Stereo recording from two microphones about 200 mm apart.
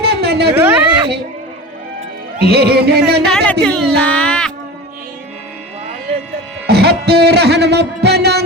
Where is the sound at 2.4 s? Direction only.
55° right (ahead or behind).